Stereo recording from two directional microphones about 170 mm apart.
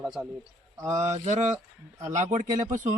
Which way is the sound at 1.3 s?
45° right (ahead or behind).